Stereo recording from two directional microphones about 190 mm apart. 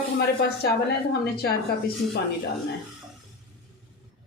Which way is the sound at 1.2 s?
60° left (ahead or behind).